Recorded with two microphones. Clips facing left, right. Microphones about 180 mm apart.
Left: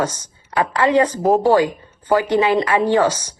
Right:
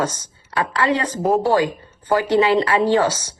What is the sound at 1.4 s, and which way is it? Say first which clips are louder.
A woman's voice: left 3 dB; 15° left (ahead or behind).